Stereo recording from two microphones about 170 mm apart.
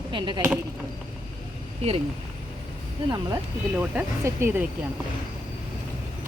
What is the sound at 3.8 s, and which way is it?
Speech, 10° right (ahead or behind).